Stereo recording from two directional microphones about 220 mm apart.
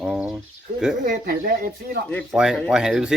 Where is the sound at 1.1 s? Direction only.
40° right (ahead or behind).